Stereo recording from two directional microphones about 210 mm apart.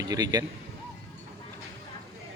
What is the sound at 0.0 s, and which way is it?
Speech, 15° right (ahead or behind).